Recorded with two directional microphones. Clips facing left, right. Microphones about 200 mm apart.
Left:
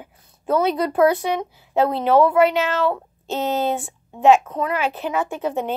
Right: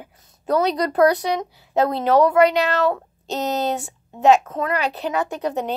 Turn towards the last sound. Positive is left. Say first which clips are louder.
# even
turn(degrees=-40)  # may be behind; listen again after turning